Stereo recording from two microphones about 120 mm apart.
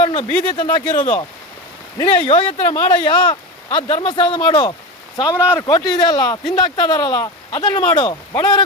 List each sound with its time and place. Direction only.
0.0 s speech: 45° left (ahead or behind)
0.9 s speech: 90° left
2.1 s speech: 45° left (ahead or behind)